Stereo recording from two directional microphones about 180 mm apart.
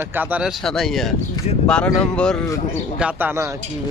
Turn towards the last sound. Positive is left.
turn(degrees=-10)  # may be behind; listen again after turning